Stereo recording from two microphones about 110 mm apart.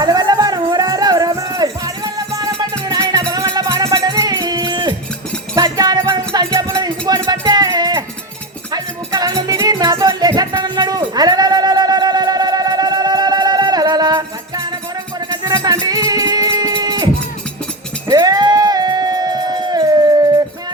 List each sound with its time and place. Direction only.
0.0 s music: 40° right (ahead or behind)
6.7 s a sound: 35° right (ahead or behind)
7.1 s music: 40° right (ahead or behind)
18.1 s music: 40° right (ahead or behind)